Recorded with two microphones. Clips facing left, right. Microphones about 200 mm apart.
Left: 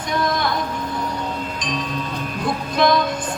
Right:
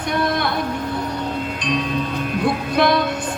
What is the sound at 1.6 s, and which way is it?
Music, 60° right (ahead or behind).